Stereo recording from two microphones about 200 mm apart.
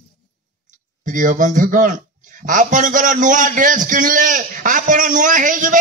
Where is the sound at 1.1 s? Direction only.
40° right (ahead or behind).